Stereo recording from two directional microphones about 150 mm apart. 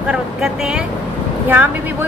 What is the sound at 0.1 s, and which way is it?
A woman's voice, 5° right (ahead or behind).